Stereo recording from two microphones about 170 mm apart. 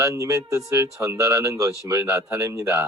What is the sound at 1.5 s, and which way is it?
Speech, 20° right (ahead or behind).